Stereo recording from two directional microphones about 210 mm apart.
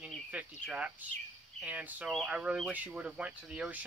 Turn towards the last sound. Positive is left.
turn(degrees=-5)  # may be behind; listen again after turning